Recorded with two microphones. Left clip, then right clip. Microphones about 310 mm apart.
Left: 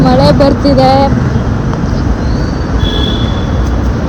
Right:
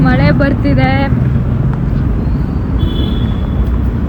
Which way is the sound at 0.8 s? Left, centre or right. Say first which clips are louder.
Left 9 dB; centre.